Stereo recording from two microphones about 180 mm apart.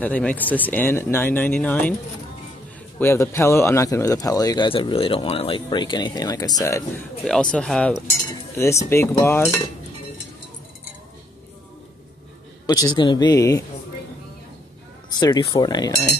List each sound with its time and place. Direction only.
0.0 s speech: 10° left (ahead or behind)
3.0 s speech: 15° left (ahead or behind)
7.2 s speech: 5° left (ahead or behind)
8.1 s speech: 15° left (ahead or behind)
12.6 s speech: 20° left (ahead or behind)
15.1 s speech: 20° left (ahead or behind)